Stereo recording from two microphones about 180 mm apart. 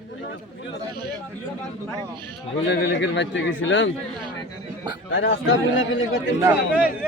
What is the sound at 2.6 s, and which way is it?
A man's voice, 90° left.